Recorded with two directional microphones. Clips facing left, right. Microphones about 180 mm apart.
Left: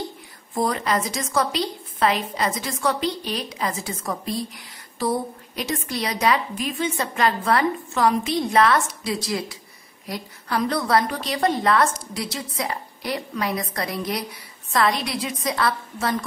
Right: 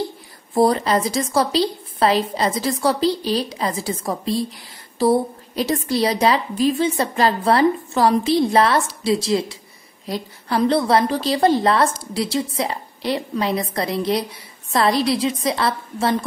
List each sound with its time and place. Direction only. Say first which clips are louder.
0.6 s a woman's voice: right 6 dB; 35° right (ahead or behind)